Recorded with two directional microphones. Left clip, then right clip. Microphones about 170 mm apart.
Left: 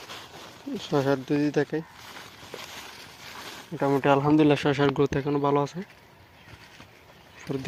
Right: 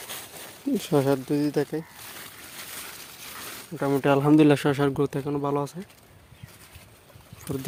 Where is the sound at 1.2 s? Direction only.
25° right (ahead or behind).